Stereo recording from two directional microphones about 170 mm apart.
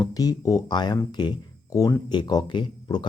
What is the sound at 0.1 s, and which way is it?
Speech, 20° left (ahead or behind).